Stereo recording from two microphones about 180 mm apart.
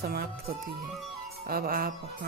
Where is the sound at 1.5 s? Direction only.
55° right (ahead or behind).